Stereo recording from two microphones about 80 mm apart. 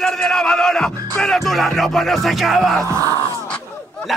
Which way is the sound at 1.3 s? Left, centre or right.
Centre.